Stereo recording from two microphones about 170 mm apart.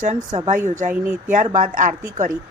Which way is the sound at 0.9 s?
10° right (ahead or behind).